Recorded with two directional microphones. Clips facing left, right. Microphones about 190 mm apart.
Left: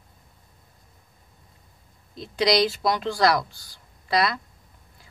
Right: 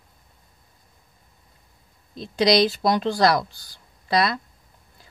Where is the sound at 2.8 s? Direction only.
35° right (ahead or behind).